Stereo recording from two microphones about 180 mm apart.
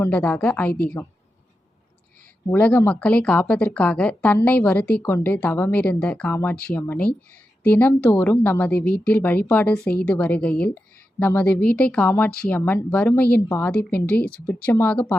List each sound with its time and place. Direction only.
0.0 s speech: 10° left (ahead or behind)
2.5 s speech: 10° left (ahead or behind)